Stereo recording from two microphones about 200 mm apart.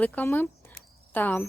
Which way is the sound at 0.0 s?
10° left (ahead or behind).